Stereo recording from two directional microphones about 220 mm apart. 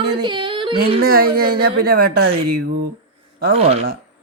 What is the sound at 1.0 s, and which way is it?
Speech, 40° right (ahead or behind).